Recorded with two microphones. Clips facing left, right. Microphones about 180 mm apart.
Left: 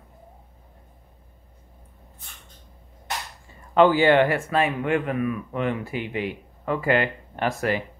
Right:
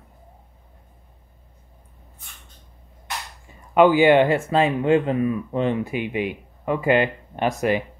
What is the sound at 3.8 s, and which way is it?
Speech, 15° right (ahead or behind).